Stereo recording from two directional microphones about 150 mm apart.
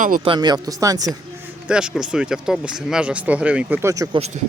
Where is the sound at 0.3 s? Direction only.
30° right (ahead or behind).